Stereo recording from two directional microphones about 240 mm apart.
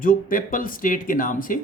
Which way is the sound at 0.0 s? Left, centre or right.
Left.